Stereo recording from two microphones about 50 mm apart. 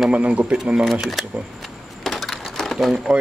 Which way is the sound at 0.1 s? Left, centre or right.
Right.